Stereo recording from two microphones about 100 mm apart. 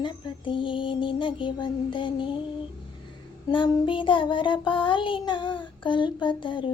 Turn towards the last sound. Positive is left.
turn(degrees=55)  # may be behind; listen again after turning